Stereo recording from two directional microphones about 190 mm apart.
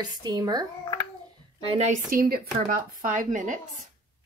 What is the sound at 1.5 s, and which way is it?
Speech, 30° right (ahead or behind).